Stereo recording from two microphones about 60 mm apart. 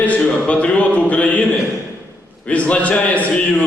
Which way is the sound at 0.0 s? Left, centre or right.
Left.